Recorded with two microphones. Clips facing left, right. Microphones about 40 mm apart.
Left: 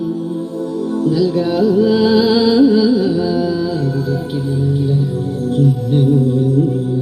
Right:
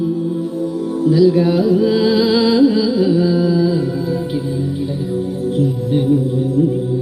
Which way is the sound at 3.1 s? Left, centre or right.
Right.